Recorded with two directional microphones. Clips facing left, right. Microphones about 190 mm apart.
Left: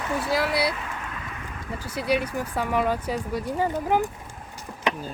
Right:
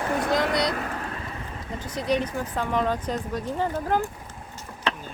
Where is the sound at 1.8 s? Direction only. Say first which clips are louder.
Even; 10° left (ahead or behind).